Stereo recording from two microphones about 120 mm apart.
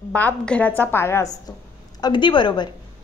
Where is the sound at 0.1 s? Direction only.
10° left (ahead or behind).